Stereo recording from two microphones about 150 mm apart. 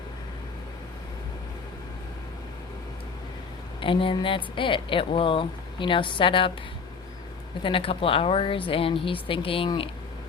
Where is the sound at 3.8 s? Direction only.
35° left (ahead or behind).